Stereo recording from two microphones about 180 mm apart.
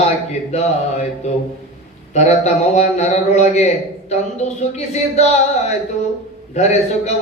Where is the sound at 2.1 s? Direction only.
40° left (ahead or behind).